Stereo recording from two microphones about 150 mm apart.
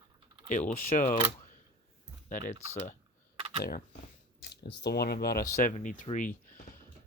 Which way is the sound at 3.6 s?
80° left.